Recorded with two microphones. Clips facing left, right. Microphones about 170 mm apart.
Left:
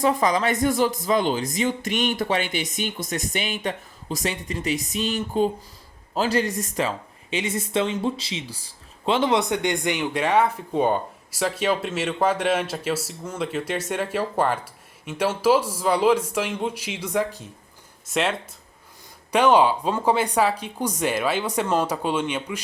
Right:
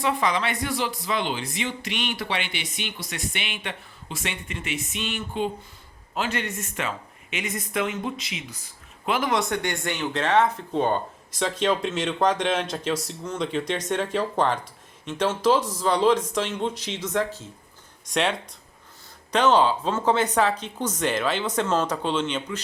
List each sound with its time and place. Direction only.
0.0 s speech: 40° left (ahead or behind); by 22.6 s 10° left (ahead or behind)